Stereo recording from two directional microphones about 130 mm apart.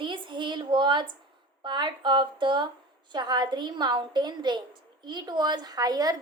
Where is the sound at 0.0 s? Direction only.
40° right (ahead or behind).